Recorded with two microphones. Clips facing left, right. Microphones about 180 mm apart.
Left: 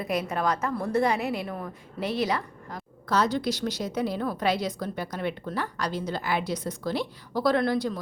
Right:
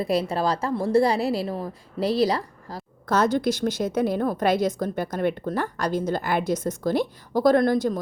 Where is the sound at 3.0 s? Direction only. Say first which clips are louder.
Right 4 dB; 50° right (ahead or behind).